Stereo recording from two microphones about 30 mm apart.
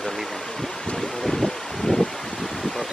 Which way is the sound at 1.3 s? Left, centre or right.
Centre.